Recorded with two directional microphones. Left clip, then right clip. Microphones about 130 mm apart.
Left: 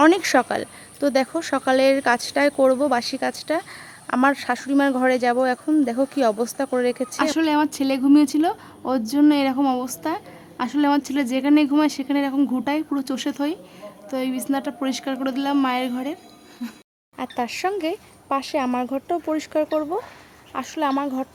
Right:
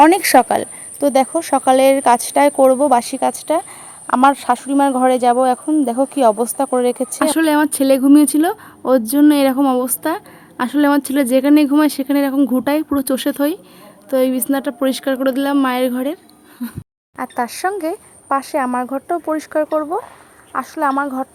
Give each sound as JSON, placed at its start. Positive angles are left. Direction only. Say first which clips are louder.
{"t": 0.0, "sound": "speech", "louder": "right 7 dB", "side_deg": -35}
{"t": 17.3, "sound": "speech", "louder": "right 5 dB", "side_deg": 0}
{"t": 18.5, "sound": "speech", "louder": "right 5 dB", "side_deg": -10}